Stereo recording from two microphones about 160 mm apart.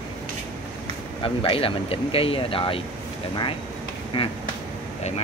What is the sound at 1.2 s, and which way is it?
Speech, 35° left (ahead or behind).